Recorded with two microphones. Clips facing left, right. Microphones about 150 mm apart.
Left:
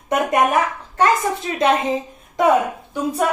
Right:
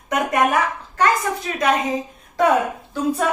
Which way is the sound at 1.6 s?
25° left (ahead or behind).